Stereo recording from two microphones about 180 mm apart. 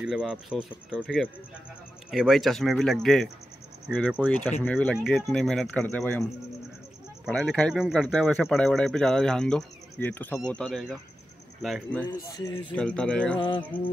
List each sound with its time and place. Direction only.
0.0 s speech: centre (ahead or behind)
7.2 s speech: 5° left (ahead or behind)
12.3 s speech: 20° left (ahead or behind)
12.7 s speech: 5° left (ahead or behind)
13.4 s speech: 25° left (ahead or behind)